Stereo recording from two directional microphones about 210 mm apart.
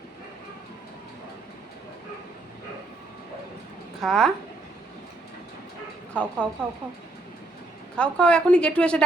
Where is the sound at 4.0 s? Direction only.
Centre (ahead or behind).